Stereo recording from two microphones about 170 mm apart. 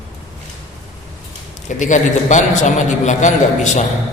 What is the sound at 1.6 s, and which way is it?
A man's voice, 45° left (ahead or behind).